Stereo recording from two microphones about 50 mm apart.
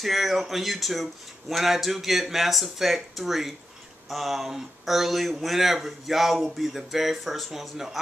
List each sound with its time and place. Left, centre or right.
0.0 s speech: centre